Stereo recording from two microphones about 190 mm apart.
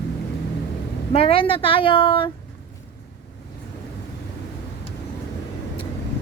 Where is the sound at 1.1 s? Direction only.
30° left (ahead or behind).